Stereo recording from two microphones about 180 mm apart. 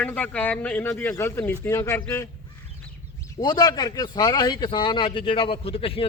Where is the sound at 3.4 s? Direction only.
25° left (ahead or behind).